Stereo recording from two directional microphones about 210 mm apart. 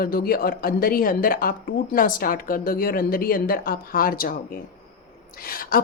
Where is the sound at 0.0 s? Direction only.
45° left (ahead or behind).